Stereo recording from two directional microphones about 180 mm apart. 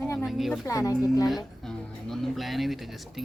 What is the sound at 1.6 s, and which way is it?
Speech, centre (ahead or behind).